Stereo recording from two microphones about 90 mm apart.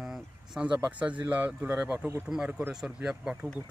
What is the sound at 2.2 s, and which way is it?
Speech, 10° right (ahead or behind).